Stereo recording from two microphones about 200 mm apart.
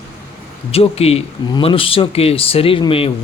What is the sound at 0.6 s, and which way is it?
Speech, 30° left (ahead or behind).